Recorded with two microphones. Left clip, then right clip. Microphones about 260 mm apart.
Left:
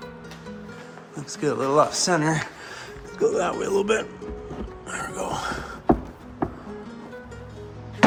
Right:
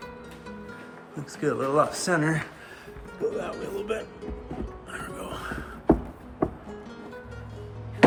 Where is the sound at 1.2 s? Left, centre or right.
Centre.